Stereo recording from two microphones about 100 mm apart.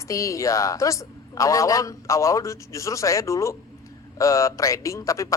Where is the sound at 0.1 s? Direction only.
30° left (ahead or behind).